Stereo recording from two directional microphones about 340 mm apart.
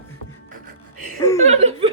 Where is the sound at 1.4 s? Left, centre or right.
Centre.